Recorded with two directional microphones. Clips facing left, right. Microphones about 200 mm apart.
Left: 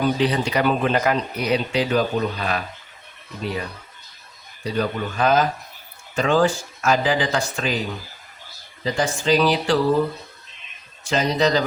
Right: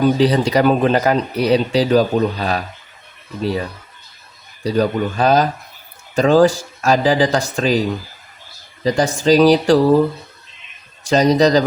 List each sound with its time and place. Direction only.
0.0 s speech: 35° right (ahead or behind)
8.8 s speech: 40° right (ahead or behind)
11.0 s speech: 40° right (ahead or behind)